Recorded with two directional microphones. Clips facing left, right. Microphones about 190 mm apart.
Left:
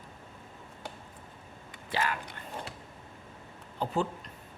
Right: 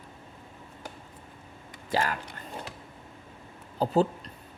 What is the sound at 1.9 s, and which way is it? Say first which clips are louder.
Speech: right 4 dB; 40° right (ahead or behind).